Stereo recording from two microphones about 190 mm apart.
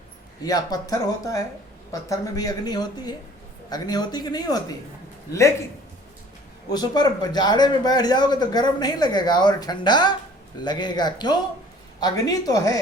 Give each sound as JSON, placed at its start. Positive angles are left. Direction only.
{"t": 0.4, "sound": "a man's voice", "side_deg": 20}
{"t": 6.7, "sound": "a man's voice", "side_deg": 20}